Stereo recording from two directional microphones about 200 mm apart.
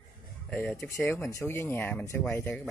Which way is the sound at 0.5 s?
5° left (ahead or behind).